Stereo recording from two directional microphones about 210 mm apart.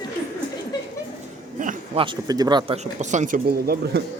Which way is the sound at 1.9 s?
25° right (ahead or behind).